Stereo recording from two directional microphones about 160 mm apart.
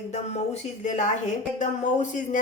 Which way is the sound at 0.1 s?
45° left (ahead or behind).